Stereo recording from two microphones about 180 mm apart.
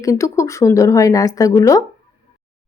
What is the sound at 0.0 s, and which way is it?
Speech, 20° left (ahead or behind).